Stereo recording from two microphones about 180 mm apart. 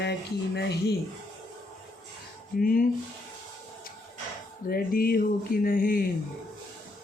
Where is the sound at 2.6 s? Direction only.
50° left (ahead or behind).